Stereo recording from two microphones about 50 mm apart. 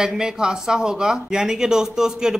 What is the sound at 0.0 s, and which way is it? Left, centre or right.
A man's voice, centre.